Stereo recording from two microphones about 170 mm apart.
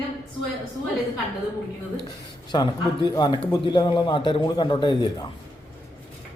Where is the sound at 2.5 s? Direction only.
25° left (ahead or behind).